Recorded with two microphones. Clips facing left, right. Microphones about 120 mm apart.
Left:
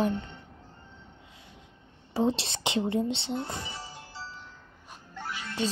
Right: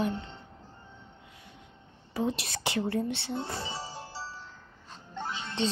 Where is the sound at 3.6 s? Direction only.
30° right (ahead or behind).